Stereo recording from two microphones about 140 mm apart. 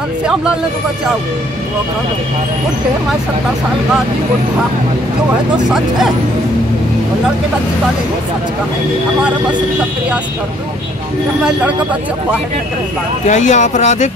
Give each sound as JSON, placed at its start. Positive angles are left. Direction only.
{"t": 13.3, "sound": "speech", "side_deg": 60}